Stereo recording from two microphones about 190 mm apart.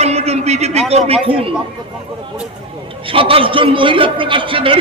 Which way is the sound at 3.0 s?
30° right (ahead or behind).